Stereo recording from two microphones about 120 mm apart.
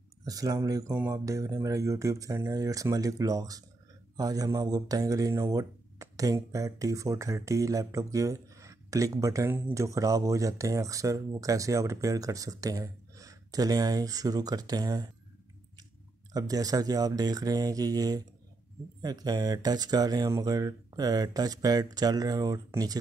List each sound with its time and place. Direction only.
0.2 s speech: 30° right (ahead or behind)
16.3 s speech: 30° right (ahead or behind)